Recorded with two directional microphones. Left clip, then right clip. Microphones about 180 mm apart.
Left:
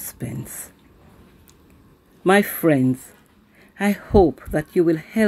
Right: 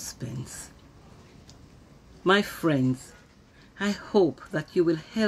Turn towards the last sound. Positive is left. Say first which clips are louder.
# left 6 dB
turn(degrees=25)  # may be behind; listen again after turning